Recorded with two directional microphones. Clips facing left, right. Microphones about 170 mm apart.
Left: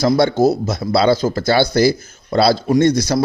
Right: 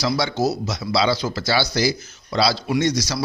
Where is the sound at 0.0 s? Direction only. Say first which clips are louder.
Left 8 dB; 50° left (ahead or behind).